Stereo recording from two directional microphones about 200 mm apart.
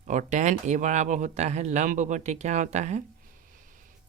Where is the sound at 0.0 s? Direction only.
40° right (ahead or behind).